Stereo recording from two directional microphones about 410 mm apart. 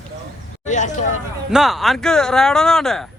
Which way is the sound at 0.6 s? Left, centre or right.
Centre.